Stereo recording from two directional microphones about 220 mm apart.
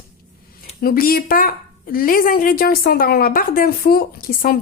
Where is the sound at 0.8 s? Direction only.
40° left (ahead or behind).